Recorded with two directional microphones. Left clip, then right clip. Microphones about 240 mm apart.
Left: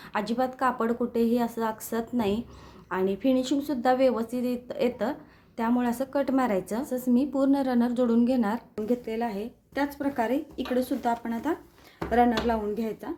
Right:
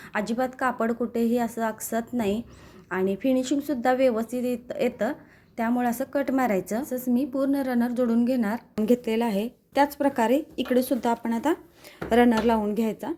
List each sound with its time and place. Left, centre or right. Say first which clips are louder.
0.1 s a woman's voice: right 1 dB; centre
8.9 s speech: right 5 dB; right